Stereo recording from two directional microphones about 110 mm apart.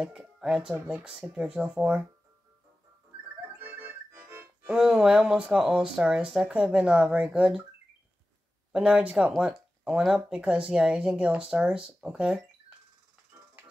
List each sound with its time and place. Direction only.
0.0 s speech: 5° right (ahead or behind)
3.5 s accordion: 20° right (ahead or behind)
4.6 s speech: 5° right (ahead or behind)
8.7 s speech: 10° right (ahead or behind)